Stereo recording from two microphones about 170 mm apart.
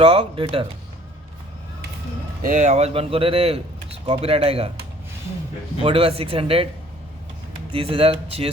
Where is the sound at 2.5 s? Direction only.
45° right (ahead or behind).